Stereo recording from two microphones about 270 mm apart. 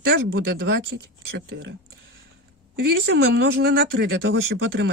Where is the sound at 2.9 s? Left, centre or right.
Right.